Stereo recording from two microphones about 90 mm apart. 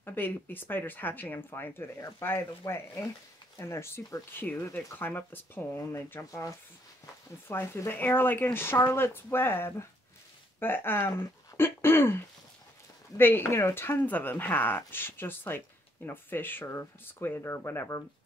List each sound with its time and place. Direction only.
0.0 s speech: 20° left (ahead or behind)
7.4 s speech: 30° left (ahead or behind)
13.2 s speech: 25° left (ahead or behind)